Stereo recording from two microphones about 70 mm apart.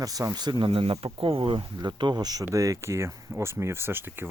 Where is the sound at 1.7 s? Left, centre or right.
Right.